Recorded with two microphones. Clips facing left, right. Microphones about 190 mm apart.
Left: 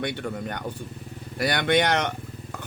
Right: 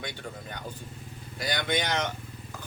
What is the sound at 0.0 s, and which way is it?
Speech, 65° left (ahead or behind).